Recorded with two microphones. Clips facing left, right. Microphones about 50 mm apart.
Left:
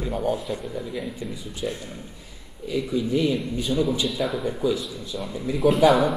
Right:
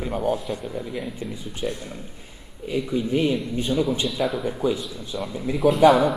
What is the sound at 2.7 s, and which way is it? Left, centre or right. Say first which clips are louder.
A man's voice: even; right.